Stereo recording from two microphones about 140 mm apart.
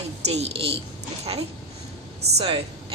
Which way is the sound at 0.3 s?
50° right (ahead or behind).